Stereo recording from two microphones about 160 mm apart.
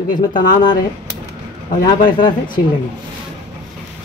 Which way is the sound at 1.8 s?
30° left (ahead or behind).